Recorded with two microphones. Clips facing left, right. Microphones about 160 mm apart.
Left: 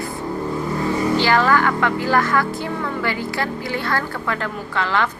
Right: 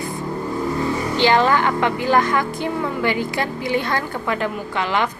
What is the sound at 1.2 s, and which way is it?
A woman's voice, 20° right (ahead or behind).